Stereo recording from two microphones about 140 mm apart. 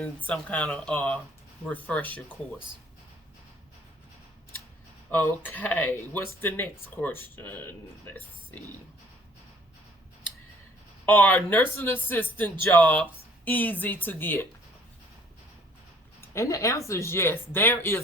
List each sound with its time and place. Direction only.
0.3 s speech: 10° left (ahead or behind)
5.1 s speech: 15° left (ahead or behind)
11.0 s speech: 15° left (ahead or behind)
16.3 s speech: 20° left (ahead or behind)